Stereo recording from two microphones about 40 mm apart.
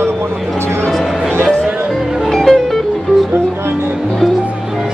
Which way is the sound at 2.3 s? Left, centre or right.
Centre.